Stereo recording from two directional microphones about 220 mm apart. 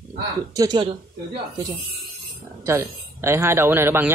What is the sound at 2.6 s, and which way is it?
A man's voice, 10° right (ahead or behind).